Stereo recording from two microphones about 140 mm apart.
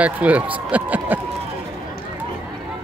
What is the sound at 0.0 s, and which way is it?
Speech, 10° right (ahead or behind).